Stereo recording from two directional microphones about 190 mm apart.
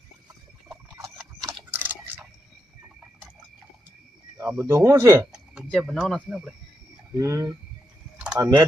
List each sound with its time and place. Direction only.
1.7 s a sound: 10° right (ahead or behind)
4.4 s speech: 15° right (ahead or behind)
5.6 s speech: centre (ahead or behind)
7.2 s speech: 15° right (ahead or behind)
8.2 s typing: 10° right (ahead or behind)